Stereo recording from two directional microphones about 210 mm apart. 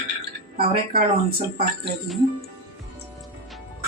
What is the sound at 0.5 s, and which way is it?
Speech, 45° right (ahead or behind).